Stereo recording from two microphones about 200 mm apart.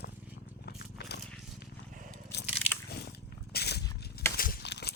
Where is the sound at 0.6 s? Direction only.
55° left (ahead or behind).